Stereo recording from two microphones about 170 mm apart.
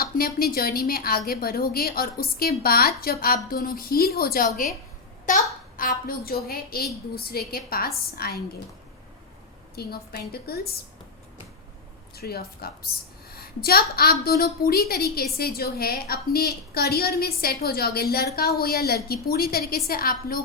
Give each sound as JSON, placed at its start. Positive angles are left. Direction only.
{"t": 0.0, "sound": "a woman's voice", "side_deg": 60}
{"t": 5.2, "sound": "a woman's voice", "side_deg": 50}
{"t": 9.7, "sound": "a woman's voice", "side_deg": 65}
{"t": 12.1, "sound": "a woman's voice", "side_deg": 65}